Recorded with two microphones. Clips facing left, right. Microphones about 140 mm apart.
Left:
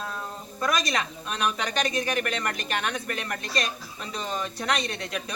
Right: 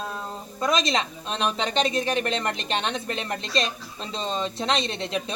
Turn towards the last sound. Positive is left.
turn(degrees=-25)  # may be behind; listen again after turning